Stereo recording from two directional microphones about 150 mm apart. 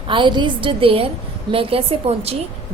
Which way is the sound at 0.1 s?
30° right (ahead or behind).